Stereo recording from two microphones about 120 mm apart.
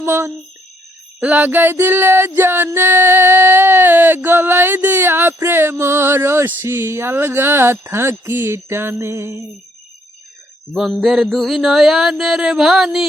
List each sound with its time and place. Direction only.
0.0 s speech: 20° right (ahead or behind)
1.2 s a sound: 15° right (ahead or behind)
10.8 s mantra: centre (ahead or behind)